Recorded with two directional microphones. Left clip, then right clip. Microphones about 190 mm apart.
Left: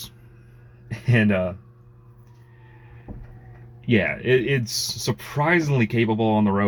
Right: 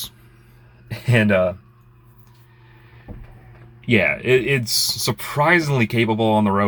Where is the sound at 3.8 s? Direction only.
5° right (ahead or behind).